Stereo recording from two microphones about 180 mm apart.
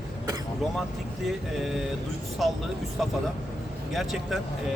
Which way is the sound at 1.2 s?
Centre (ahead or behind).